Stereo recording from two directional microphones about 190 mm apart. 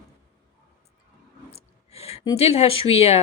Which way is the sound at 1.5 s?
30° left (ahead or behind).